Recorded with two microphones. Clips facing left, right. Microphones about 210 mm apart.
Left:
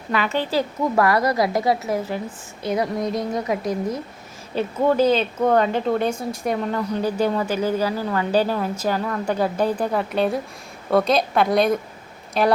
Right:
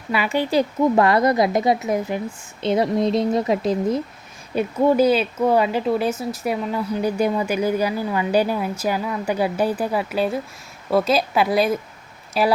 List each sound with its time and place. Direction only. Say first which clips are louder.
0.1 s speech: right 2 dB; 10° right (ahead or behind)
0.9 s a woman's voice: even; 25° right (ahead or behind)
4.5 s a woman's voice: right 2 dB; 10° right (ahead or behind)